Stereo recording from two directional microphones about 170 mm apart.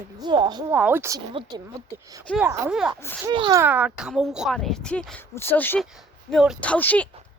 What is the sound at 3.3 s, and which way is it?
Speech, 25° right (ahead or behind).